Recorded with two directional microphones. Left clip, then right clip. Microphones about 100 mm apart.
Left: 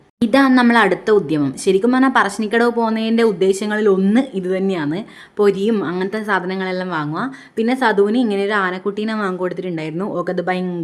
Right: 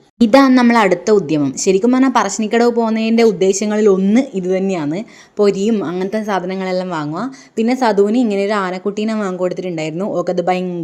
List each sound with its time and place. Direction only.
0.2 s speech: 40° right (ahead or behind)
0.7 s a woman's voice: 30° right (ahead or behind)